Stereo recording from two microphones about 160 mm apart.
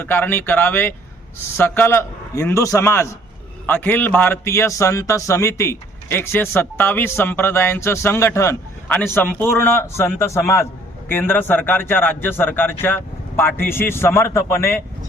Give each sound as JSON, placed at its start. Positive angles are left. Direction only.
{"t": 0.0, "sound": "a man's voice", "side_deg": 10}